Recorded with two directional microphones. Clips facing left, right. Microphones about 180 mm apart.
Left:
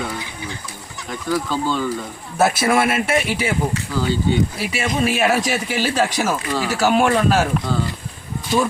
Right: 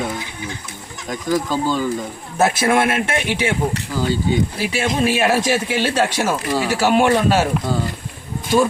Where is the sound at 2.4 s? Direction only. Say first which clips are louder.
Right 1 dB; 5° left (ahead or behind).